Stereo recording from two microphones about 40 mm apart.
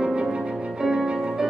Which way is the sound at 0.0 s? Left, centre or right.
Right.